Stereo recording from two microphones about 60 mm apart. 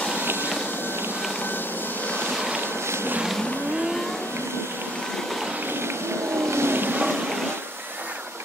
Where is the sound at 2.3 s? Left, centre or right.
Centre.